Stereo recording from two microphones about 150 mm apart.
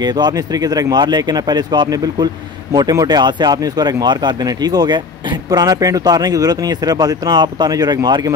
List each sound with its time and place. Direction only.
0.7 s speech: 25° right (ahead or behind)